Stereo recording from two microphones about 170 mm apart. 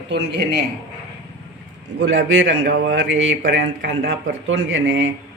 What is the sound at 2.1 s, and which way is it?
Speech, 90° right.